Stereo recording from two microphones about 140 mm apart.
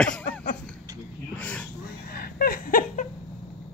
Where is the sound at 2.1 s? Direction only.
90° left.